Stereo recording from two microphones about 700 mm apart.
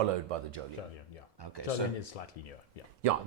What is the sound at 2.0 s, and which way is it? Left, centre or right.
Speech, left.